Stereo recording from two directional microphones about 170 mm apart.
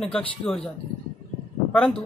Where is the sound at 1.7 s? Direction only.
Centre (ahead or behind).